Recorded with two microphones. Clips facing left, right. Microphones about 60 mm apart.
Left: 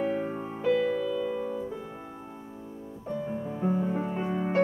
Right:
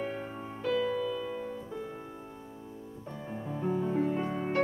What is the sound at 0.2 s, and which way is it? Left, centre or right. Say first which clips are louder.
Music: left 6 dB; centre.